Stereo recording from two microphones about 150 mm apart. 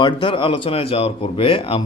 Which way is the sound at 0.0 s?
35° left (ahead or behind).